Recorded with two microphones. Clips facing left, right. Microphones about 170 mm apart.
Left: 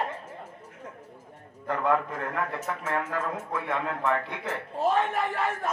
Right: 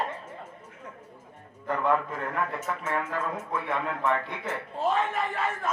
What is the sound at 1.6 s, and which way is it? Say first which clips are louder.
Speech: even; 40° left (ahead or behind).